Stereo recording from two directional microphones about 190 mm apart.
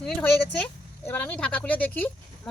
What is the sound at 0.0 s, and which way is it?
Speech, 5° left (ahead or behind).